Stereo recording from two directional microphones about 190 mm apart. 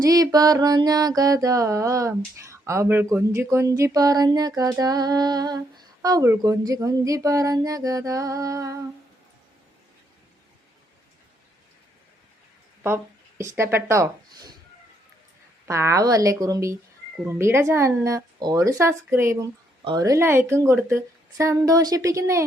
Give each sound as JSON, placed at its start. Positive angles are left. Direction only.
{"t": 0.0, "sound": "mantra", "side_deg": -20}
{"t": 13.6, "sound": "speech", "side_deg": -15}
{"t": 15.6, "sound": "a woman's voice", "side_deg": -15}